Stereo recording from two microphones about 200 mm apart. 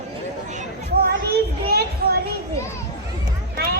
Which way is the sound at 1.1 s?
50° right (ahead or behind).